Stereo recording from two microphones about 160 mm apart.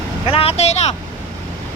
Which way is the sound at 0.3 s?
35° left (ahead or behind).